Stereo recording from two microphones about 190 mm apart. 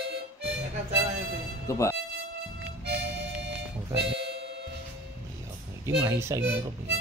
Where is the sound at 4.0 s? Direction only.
60° right (ahead or behind).